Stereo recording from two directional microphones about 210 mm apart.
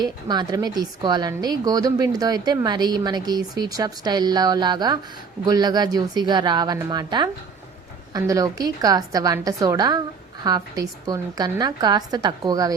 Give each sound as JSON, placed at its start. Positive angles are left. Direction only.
{"t": 0.0, "sound": "a woman's voice", "side_deg": -20}